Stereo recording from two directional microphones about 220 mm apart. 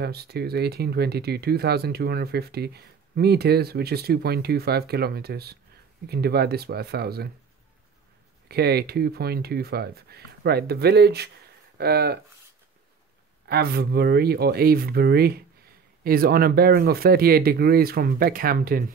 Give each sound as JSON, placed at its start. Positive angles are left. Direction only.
{"t": 0.0, "sound": "speech", "side_deg": -45}
{"t": 8.5, "sound": "speech", "side_deg": -45}
{"t": 13.5, "sound": "speech", "side_deg": -45}